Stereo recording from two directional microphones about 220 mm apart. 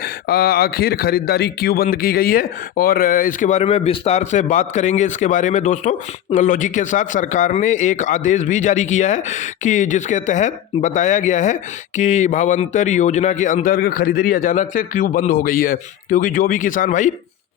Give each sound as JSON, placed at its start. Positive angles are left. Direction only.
{"t": 0.0, "sound": "a man's voice", "side_deg": 45}